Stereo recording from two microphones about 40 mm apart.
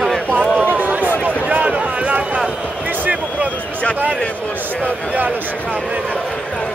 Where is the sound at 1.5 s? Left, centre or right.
Right.